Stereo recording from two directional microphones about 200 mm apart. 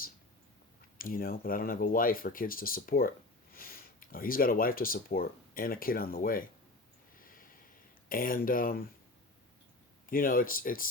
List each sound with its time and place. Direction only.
0.9 s speech: 45° left (ahead or behind)
7.2 s a sound: 45° left (ahead or behind)
8.1 s speech: 45° left (ahead or behind)
10.1 s speech: 45° left (ahead or behind)